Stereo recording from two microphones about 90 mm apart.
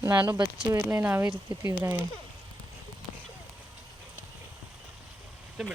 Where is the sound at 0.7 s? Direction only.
25° right (ahead or behind).